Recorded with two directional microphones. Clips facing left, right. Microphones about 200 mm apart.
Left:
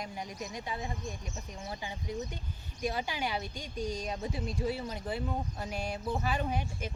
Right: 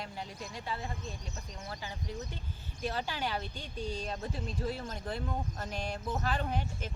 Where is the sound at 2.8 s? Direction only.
15° left (ahead or behind).